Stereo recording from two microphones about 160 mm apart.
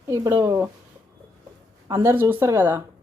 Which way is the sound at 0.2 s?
20° right (ahead or behind).